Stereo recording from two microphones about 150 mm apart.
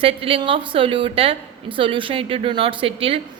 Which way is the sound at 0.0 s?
40° right (ahead or behind).